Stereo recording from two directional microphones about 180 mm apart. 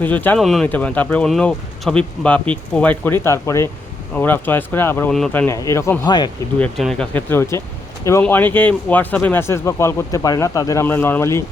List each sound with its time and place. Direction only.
0.0 s speech: 10° left (ahead or behind)
6.6 s speech: 5° left (ahead or behind)